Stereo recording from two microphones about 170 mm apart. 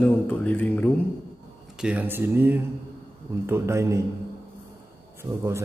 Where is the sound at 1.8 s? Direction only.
10° right (ahead or behind).